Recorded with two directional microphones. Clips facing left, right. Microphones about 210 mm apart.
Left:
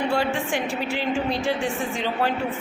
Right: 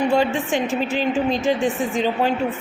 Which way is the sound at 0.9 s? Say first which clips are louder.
Right 4 dB; 20° right (ahead or behind).